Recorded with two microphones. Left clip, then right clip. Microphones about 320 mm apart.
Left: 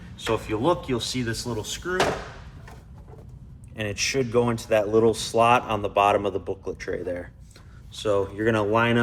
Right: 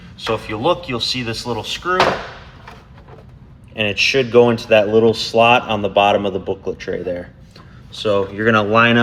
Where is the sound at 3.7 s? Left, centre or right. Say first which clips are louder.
Right 10 dB; right.